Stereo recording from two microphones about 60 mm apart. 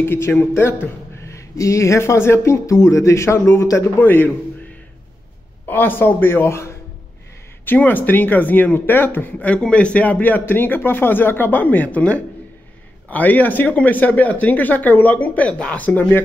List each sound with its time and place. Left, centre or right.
0.0 s speech: left
1.2 s speech: left
4.0 s speech: left
5.7 s speech: left
7.6 s speech: left
9.5 s speech: centre